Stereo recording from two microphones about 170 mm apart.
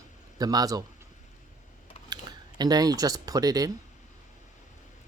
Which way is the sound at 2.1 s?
25° right (ahead or behind).